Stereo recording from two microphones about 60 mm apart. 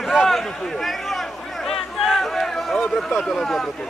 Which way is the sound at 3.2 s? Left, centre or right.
Centre.